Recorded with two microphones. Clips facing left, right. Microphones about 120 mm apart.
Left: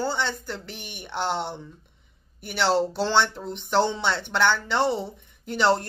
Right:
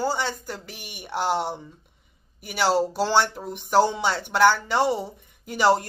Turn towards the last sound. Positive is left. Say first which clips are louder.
# right 2 dB
turn(degrees=-10)  # may be behind; listen again after turning